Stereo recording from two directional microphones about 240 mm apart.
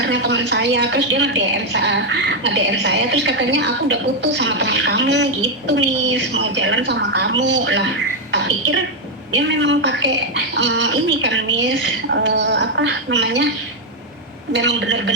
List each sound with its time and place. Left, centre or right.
0.0 s a woman's voice: right
8.3 s a sound: right
9.3 s a woman's voice: right
14.5 s a woman's voice: right